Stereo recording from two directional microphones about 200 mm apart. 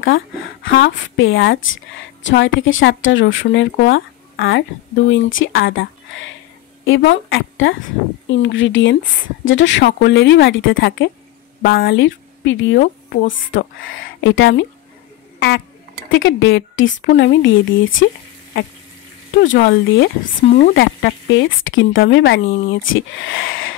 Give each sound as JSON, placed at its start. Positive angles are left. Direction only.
{"t": 0.0, "sound": "speech", "side_deg": 70}
{"t": 3.8, "sound": "a woman's voice", "side_deg": 60}
{"t": 15.3, "sound": "a sound", "side_deg": 70}
{"t": 16.1, "sound": "speech", "side_deg": 65}
{"t": 19.4, "sound": "speech", "side_deg": 70}